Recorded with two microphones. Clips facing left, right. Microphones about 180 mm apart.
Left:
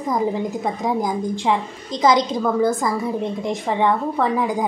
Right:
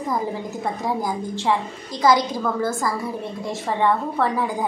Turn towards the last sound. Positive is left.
turn(degrees=15)  # may be behind; listen again after turning